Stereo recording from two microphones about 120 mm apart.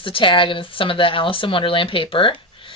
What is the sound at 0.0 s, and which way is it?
Speech, 45° left (ahead or behind).